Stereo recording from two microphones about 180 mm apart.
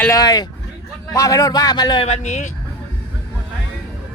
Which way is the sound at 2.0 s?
40° left (ahead or behind).